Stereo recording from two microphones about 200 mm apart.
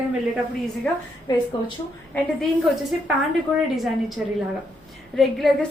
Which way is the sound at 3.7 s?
Centre (ahead or behind).